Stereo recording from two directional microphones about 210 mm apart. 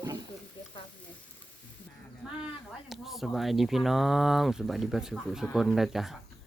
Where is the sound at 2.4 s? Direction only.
Centre (ahead or behind).